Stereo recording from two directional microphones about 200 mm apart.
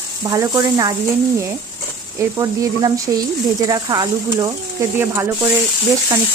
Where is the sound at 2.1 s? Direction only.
15° right (ahead or behind).